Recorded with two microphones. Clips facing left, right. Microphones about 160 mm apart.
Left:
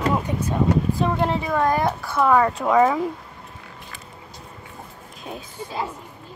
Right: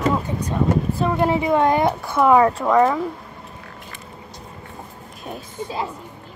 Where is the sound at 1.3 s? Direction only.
20° right (ahead or behind).